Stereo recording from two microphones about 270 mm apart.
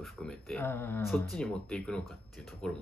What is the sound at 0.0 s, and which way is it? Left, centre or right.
Speech, centre.